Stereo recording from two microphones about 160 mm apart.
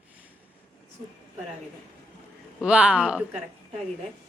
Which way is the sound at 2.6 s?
5° right (ahead or behind).